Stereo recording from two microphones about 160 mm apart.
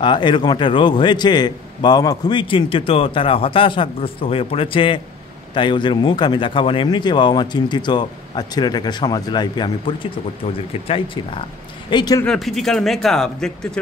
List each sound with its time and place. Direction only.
0.0 s a man's voice: 30° left (ahead or behind)
12.3 s speech: centre (ahead or behind)